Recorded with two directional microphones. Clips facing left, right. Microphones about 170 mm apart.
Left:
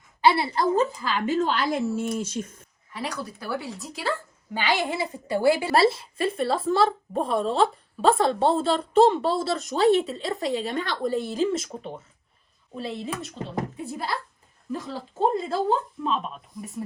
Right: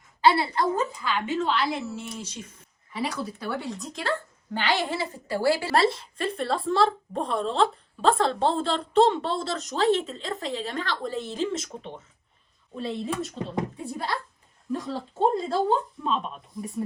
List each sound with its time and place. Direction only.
0.3 s a woman's voice: 30° left (ahead or behind); by 2.6 s 50° left (ahead or behind)
2.9 s a woman's voice: centre (ahead or behind); by 5.7 s 20° left (ahead or behind)
5.7 s a woman's voice: 5° left (ahead or behind)